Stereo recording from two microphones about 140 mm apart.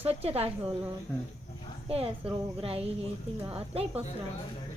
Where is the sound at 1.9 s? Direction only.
45° right (ahead or behind).